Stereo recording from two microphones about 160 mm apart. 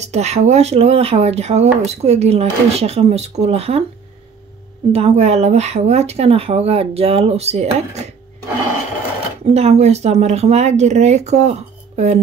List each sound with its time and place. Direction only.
0.0 s speech: 45° right (ahead or behind)
4.9 s speech: 40° right (ahead or behind)
9.4 s speech: 40° right (ahead or behind)